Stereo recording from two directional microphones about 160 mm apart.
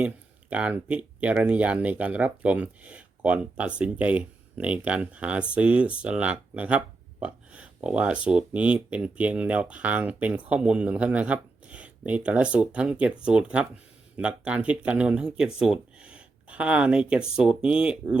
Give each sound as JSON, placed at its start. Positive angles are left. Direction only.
{"t": 0.5, "sound": "speech", "side_deg": -10}